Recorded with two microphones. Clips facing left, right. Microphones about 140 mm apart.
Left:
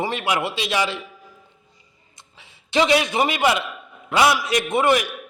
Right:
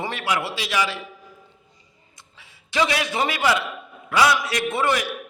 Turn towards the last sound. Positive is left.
turn(degrees=20)  # may be behind; listen again after turning